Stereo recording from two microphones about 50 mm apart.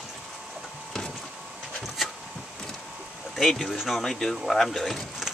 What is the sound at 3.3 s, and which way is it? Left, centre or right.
Speech, centre.